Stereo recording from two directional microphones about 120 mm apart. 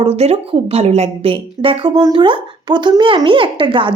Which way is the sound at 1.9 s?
35° right (ahead or behind).